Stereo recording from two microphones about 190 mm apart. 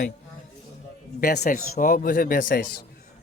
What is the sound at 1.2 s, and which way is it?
Speech, 55° left (ahead or behind).